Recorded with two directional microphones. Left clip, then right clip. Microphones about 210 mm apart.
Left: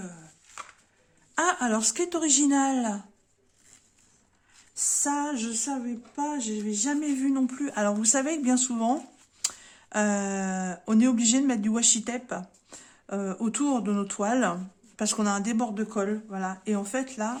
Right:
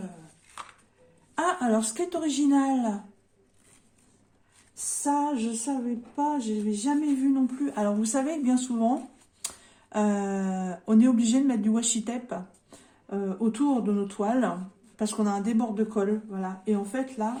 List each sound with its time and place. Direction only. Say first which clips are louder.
1.4 s speech: even; 40° left (ahead or behind)
5.0 s speech: right 7 dB; 40° left (ahead or behind)
12.7 s speech: even; 40° left (ahead or behind)